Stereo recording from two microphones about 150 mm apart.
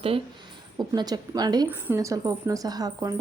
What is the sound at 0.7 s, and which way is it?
Speech, 25° right (ahead or behind).